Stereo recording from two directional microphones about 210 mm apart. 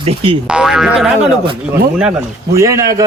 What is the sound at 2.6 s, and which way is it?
Speech, 15° right (ahead or behind).